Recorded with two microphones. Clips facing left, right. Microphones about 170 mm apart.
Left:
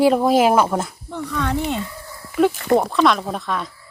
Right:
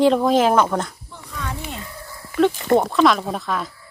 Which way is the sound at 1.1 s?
75° left (ahead or behind).